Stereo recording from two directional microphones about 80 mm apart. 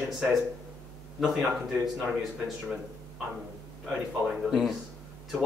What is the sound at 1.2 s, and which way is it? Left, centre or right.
Speech, centre.